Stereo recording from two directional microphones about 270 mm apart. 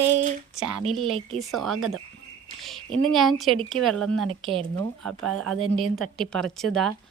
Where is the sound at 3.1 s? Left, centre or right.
Centre.